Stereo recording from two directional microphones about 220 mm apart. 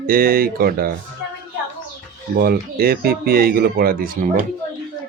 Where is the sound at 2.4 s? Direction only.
45° right (ahead or behind).